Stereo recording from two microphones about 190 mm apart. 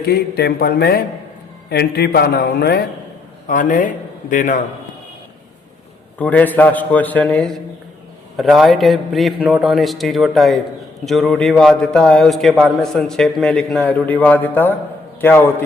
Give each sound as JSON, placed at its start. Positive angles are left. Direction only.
{"t": 0.1, "sound": "a man's voice", "side_deg": 55}
{"t": 3.4, "sound": "a man's voice", "side_deg": 45}
{"t": 6.1, "sound": "a man's voice", "side_deg": 10}